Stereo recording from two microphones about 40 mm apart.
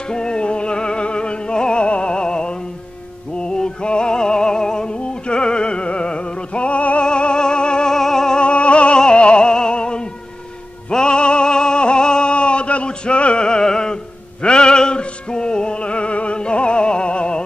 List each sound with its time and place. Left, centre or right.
0.1 s music: left
7.9 s music: centre
8.4 s music: left